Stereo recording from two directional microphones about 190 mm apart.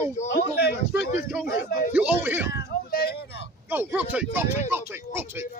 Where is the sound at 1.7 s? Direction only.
50° left (ahead or behind).